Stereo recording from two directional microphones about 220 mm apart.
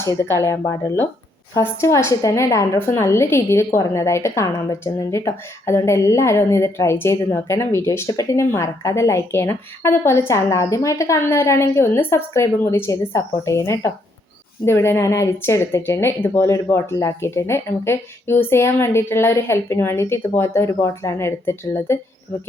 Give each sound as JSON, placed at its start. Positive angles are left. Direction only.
{"t": 0.0, "sound": "speech", "side_deg": 10}